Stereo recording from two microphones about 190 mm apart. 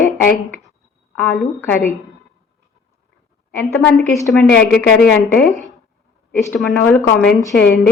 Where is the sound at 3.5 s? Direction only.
10° left (ahead or behind).